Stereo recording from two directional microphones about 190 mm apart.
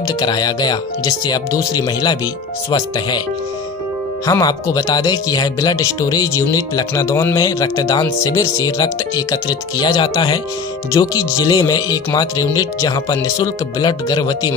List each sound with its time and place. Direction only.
0.0 s speech: 20° left (ahead or behind)
4.3 s speech: 20° left (ahead or behind)